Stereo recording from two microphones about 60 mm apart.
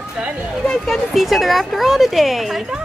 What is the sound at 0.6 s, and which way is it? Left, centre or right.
Speech, centre.